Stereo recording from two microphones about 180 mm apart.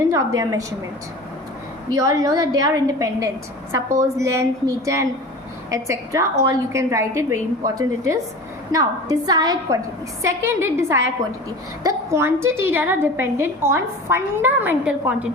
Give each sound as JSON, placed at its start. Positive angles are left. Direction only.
{"t": 0.1, "sound": "a woman's voice", "side_deg": -20}
{"t": 1.9, "sound": "a woman's voice", "side_deg": -20}